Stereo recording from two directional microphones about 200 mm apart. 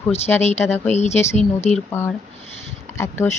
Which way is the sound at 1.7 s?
10° left (ahead or behind).